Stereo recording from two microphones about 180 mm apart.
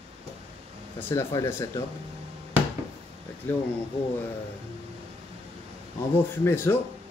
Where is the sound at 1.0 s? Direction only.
15° left (ahead or behind).